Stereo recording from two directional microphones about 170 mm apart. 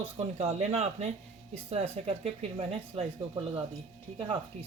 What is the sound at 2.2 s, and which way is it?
Speech, 35° right (ahead or behind).